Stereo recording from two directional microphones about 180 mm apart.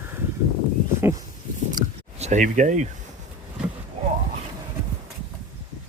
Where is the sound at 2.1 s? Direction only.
40° right (ahead or behind).